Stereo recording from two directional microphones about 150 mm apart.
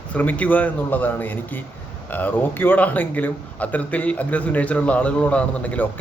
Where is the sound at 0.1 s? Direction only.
10° left (ahead or behind).